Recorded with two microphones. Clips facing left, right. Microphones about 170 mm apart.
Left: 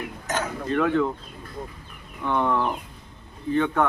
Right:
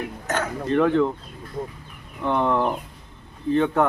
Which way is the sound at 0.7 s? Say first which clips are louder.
Right 3 dB; 25° right (ahead or behind).